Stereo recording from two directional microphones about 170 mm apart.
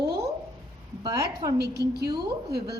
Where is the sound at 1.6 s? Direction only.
70° right (ahead or behind).